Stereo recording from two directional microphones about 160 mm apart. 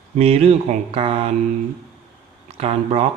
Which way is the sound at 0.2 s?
40° right (ahead or behind).